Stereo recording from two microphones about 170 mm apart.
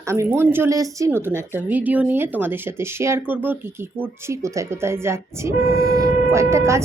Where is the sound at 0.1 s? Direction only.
15° right (ahead or behind).